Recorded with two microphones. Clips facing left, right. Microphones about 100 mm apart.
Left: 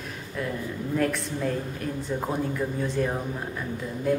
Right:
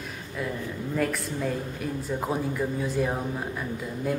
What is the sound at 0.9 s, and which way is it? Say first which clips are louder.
A woman's voice: left 2 dB; 5° right (ahead or behind).